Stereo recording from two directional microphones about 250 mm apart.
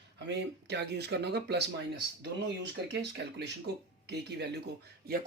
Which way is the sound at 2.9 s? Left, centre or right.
Right.